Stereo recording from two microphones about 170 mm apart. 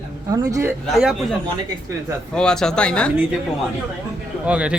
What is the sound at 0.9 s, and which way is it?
Speech, centre (ahead or behind).